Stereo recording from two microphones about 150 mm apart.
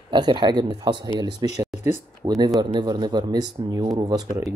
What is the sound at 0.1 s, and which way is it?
Speech, 30° right (ahead or behind).